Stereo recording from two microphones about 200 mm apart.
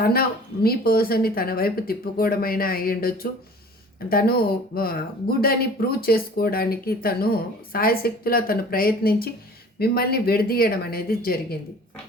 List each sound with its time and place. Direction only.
0.0 s speech: 50° left (ahead or behind)